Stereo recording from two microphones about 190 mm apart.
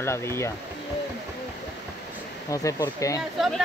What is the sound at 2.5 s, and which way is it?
Speech, 15° left (ahead or behind).